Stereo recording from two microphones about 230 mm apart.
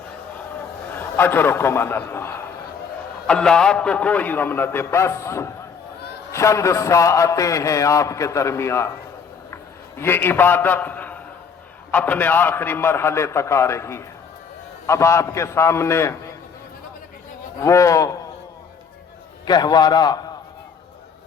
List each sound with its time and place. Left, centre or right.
0.9 s a man's voice: centre
10.0 s a man's voice: centre
17.6 s a man's voice: centre
19.5 s a man's voice: centre